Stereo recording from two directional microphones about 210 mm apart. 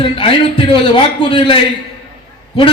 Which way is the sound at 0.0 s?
25° left (ahead or behind).